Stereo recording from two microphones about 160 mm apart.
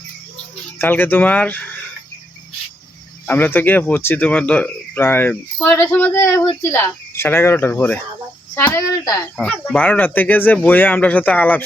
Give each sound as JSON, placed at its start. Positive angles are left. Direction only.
{"t": 0.8, "sound": "speech", "side_deg": 10}
{"t": 3.2, "sound": "speech", "side_deg": 10}
{"t": 9.4, "sound": "speech", "side_deg": 10}